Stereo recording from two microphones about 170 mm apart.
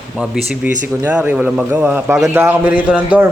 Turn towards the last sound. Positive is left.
turn(degrees=-10)  # may be behind; listen again after turning